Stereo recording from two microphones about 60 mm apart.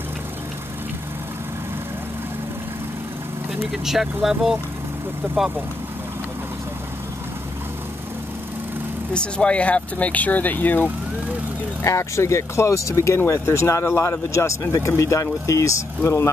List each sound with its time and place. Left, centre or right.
3.7 s speech: centre
9.1 s speech: centre
11.8 s speech: left
16.0 s speech: left